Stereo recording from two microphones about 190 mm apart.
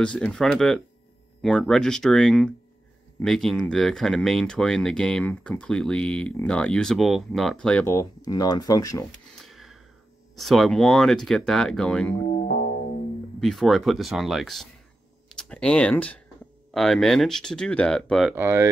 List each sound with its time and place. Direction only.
0.0 s speech: 5° left (ahead or behind)
7.9 s speech: 20° left (ahead or behind)
9.3 s a sound: centre (ahead or behind)
10.3 s speech: centre (ahead or behind)
12.3 s music: 45° left (ahead or behind)
13.4 s speech: centre (ahead or behind)
18.3 s speech: 15° right (ahead or behind)